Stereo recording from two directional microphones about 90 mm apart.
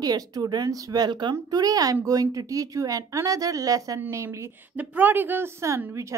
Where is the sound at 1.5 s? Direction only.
45° right (ahead or behind).